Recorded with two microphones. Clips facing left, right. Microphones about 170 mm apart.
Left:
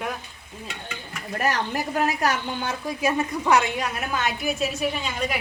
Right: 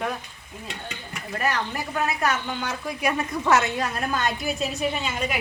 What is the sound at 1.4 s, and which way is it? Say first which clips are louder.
A woman's voice: left 2 dB; 40° left (ahead or behind).